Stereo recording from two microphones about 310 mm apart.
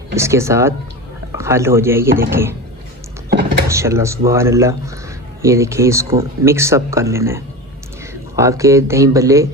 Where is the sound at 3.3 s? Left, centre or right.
Right.